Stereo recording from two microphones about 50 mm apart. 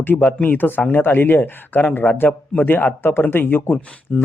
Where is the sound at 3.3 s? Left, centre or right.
Left.